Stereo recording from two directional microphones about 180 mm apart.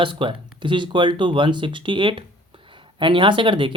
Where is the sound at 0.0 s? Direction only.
25° right (ahead or behind).